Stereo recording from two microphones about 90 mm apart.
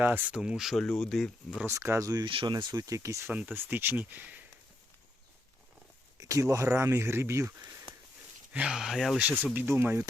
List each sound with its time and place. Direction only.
0.0 s speech: 20° right (ahead or behind); by 1.3 s 5° left (ahead or behind)
1.6 s speech: 30° right (ahead or behind)
2.2 s speech: 65° right (ahead or behind); by 3.2 s 35° right (ahead or behind)
3.2 s speech: 15° right (ahead or behind)
6.1 s speech: 35° right (ahead or behind)
8.5 s speech: 10° right (ahead or behind)
9.2 s speech: 20° right (ahead or behind)